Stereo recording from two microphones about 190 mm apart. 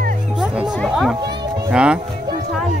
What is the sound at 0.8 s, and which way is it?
Speech, centre (ahead or behind).